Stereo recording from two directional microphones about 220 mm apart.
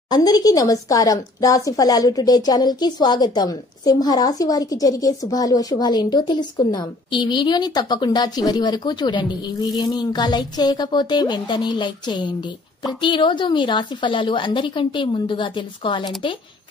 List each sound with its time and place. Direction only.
0.1 s a woman's voice: 15° left (ahead or behind)